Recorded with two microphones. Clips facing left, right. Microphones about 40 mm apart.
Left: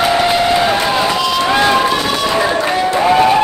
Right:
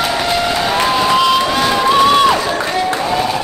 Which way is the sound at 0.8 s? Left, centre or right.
Centre.